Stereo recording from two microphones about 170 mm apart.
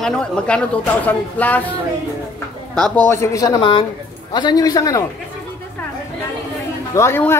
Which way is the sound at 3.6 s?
30° left (ahead or behind).